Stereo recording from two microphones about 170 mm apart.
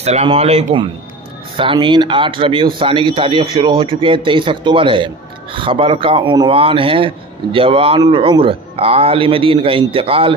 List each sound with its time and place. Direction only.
0.0 s a man's voice: 35° right (ahead or behind)
1.6 s a man's voice: 30° right (ahead or behind)